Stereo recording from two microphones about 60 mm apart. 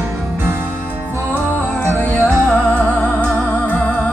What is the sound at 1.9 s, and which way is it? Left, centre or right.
Music, left.